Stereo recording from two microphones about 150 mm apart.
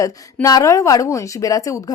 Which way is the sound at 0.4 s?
20° left (ahead or behind).